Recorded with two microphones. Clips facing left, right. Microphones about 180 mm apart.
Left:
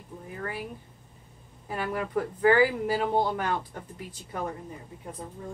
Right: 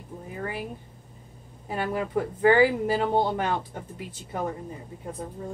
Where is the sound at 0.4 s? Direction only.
20° right (ahead or behind).